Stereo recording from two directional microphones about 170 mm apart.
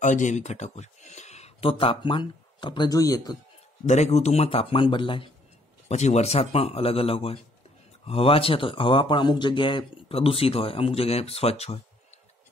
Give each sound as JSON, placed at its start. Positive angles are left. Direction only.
{"t": 0.0, "sound": "speech", "side_deg": 45}
{"t": 3.8, "sound": "speech", "side_deg": 40}
{"t": 5.9, "sound": "speech", "side_deg": 40}